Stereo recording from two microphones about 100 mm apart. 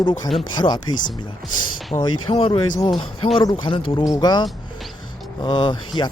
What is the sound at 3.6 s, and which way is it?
Speech, 60° left (ahead or behind).